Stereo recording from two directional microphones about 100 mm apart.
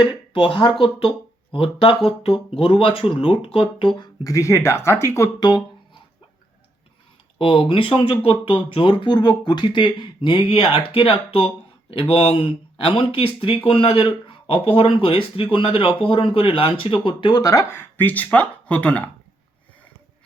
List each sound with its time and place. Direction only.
0.0 s speech: 60° left (ahead or behind)
4.2 s speech: 30° left (ahead or behind)
5.4 s a sound: 50° left (ahead or behind)
7.3 s speech: 60° left (ahead or behind)
17.4 s speech: 35° left (ahead or behind); by 19.1 s 15° left (ahead or behind)